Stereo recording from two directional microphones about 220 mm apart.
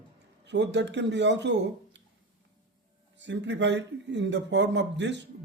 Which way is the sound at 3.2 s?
55° right (ahead or behind).